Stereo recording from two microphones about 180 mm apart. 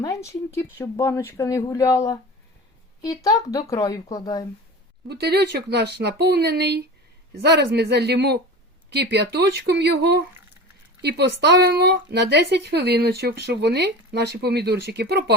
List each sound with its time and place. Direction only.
0.0 s a woman's voice: 15° left (ahead or behind)
5.0 s speech: 65° right (ahead or behind)